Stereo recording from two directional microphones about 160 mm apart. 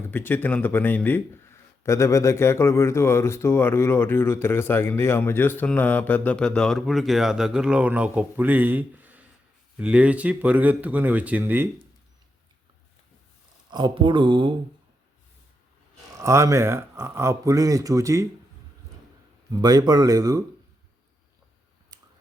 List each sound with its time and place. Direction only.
0.1 s speech: 10° left (ahead or behind); by 11.7 s 10° right (ahead or behind)
13.7 s speech: 25° right (ahead or behind)
16.1 s speech: 20° right (ahead or behind)
19.6 s speech: 25° right (ahead or behind)